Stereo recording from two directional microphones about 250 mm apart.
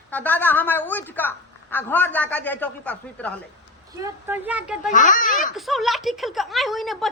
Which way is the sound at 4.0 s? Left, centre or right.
Centre.